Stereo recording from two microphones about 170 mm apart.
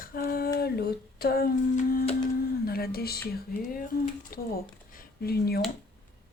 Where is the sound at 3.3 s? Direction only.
55° left (ahead or behind).